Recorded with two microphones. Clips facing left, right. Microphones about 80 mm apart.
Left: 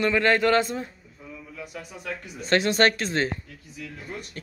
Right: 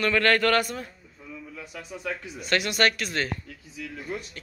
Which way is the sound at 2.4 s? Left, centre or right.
Left.